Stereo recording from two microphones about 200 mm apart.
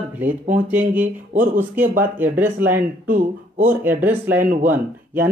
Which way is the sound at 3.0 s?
40° right (ahead or behind).